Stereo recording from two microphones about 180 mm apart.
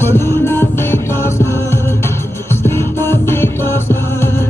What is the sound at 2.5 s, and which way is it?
Music, 15° left (ahead or behind).